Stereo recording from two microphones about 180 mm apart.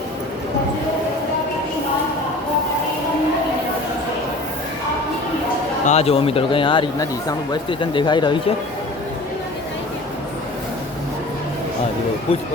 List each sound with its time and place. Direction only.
5.8 s a man's voice: 35° left (ahead or behind)